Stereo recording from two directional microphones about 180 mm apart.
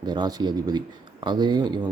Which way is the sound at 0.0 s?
25° right (ahead or behind).